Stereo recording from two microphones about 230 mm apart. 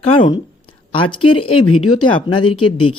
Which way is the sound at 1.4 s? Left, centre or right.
Left.